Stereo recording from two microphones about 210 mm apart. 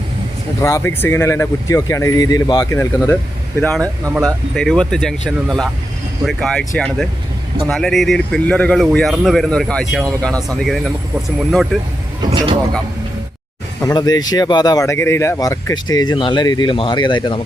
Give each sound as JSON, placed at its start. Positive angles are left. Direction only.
{"t": 0.6, "sound": "speech", "side_deg": 10}
{"t": 4.0, "sound": "speech", "side_deg": -15}
{"t": 4.5, "sound": "speech", "side_deg": 5}
{"t": 12.2, "sound": "speech", "side_deg": -20}
{"t": 13.8, "sound": "speech", "side_deg": 20}